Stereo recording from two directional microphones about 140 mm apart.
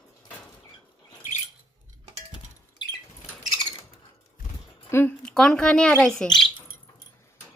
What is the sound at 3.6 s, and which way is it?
Bird, 40° left (ahead or behind).